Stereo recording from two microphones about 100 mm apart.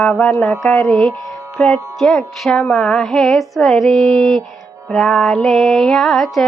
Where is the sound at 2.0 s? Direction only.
Centre (ahead or behind).